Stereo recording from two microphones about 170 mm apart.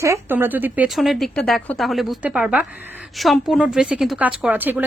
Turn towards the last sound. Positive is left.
turn(degrees=-10)  # may be behind; listen again after turning